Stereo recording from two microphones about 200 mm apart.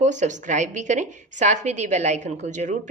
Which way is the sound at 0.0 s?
35° right (ahead or behind).